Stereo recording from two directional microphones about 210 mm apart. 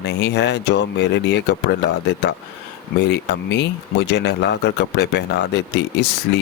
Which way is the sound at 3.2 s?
55° left (ahead or behind).